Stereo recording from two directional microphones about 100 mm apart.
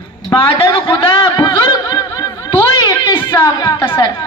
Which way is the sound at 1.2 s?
45° left (ahead or behind).